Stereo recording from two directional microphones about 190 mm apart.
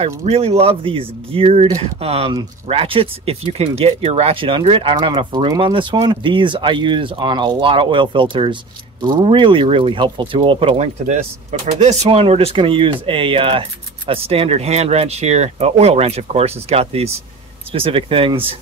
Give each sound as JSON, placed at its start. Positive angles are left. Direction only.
{"t": 0.3, "sound": "speech", "side_deg": -30}